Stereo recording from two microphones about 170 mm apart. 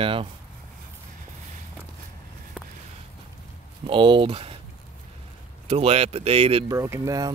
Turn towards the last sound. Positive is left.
turn(degrees=-20)  # may be behind; listen again after turning